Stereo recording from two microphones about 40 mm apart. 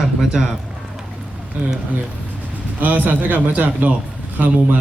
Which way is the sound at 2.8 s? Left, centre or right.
Right.